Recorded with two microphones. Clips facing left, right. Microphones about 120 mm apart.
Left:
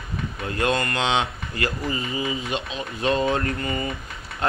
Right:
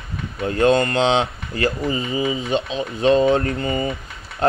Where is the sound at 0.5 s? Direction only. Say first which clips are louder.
Right 7 dB; 30° right (ahead or behind).